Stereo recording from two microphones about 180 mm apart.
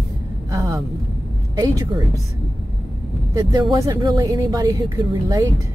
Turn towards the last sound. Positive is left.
turn(degrees=-20)  # may be behind; listen again after turning